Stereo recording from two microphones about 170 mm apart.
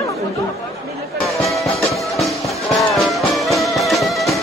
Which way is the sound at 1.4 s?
Centre (ahead or behind).